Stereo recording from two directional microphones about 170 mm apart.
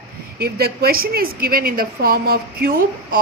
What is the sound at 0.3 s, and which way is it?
A woman's voice, 70° right (ahead or behind).